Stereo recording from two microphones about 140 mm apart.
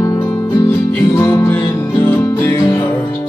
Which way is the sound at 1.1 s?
25° left (ahead or behind).